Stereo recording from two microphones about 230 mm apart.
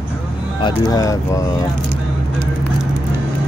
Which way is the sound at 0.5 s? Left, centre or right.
Centre.